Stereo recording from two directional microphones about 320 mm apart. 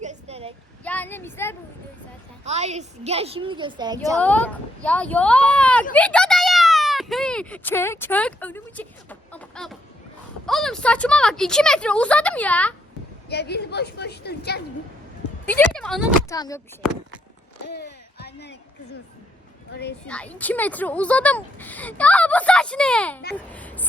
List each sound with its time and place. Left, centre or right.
0.0 s child singing: right
0.9 s speech: centre
2.4 s a woman's voice: right
4.2 s speech: centre
5.9 s a sound: centre
10.4 s speech: centre
13.3 s a woman's voice: left
15.4 s speech: centre
16.3 s speech: centre
17.7 s a sound: left
20.1 s a woman's voice: centre